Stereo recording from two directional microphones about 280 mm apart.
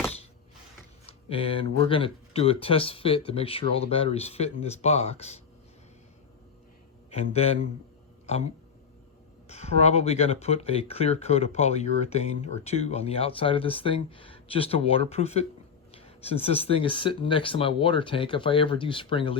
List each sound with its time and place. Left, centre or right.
1.0 s speech: centre
7.1 s speech: left
9.5 s speech: left